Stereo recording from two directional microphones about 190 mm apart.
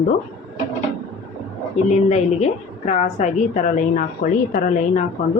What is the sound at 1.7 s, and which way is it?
A woman's voice, 35° left (ahead or behind).